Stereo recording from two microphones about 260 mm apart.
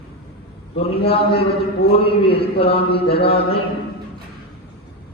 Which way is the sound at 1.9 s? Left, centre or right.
Left.